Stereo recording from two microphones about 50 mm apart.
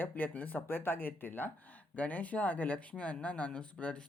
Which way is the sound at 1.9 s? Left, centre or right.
Left.